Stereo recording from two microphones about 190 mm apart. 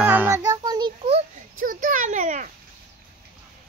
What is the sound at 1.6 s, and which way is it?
Speech, 45° right (ahead or behind).